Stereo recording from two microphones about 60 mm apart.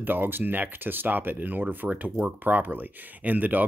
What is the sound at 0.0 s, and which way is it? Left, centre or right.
Speech, right.